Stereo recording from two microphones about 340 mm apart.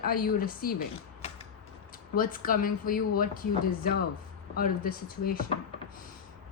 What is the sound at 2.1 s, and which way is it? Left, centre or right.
Speech, left.